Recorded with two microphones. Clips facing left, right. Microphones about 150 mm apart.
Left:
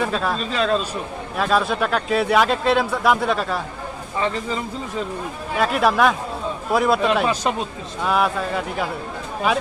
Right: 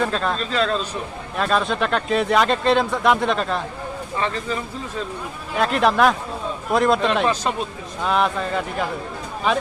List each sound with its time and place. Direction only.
0.0 s speech: 5° left (ahead or behind)
4.2 s speech: 15° left (ahead or behind)
5.5 s speech: 5° left (ahead or behind)